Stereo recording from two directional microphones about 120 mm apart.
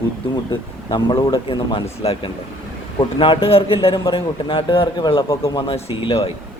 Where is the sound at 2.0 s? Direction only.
55° left (ahead or behind).